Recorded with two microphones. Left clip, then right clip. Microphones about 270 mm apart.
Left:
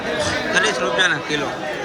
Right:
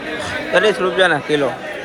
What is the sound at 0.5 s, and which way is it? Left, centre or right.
Speech, centre.